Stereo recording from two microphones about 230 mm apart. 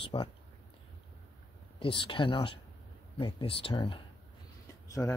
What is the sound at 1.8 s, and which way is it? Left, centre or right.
Speech, left.